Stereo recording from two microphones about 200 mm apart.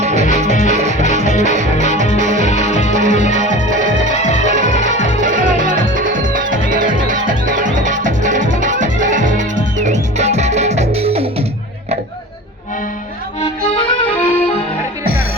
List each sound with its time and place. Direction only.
0.0 s music: 35° right (ahead or behind)
1.3 s music: 35° left (ahead or behind)
2.1 s music: 40° right (ahead or behind)
2.4 s music: 35° left (ahead or behind)
2.9 s music: 40° right (ahead or behind)
4.2 s music: 35° left (ahead or behind)
4.4 s music: 40° right (ahead or behind)
13.4 s music: 25° left (ahead or behind)
14.1 s accordion: 10° left (ahead or behind)